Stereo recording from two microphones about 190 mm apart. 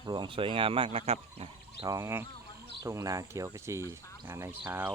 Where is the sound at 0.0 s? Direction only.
25° right (ahead or behind).